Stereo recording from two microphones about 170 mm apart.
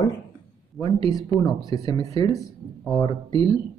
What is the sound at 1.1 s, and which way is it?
Speech, 20° left (ahead or behind).